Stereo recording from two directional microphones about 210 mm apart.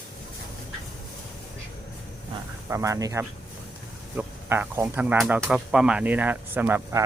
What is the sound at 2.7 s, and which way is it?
Speech, 15° right (ahead or behind).